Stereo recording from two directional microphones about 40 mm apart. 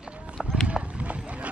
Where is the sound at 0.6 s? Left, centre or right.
Right.